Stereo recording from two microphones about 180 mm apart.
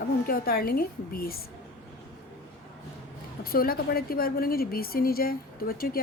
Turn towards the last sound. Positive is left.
turn(degrees=55)  # may be behind; listen again after turning